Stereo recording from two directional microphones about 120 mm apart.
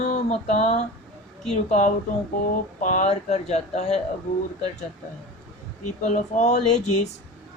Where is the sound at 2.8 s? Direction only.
90° left; by 4.0 s 65° left (ahead or behind).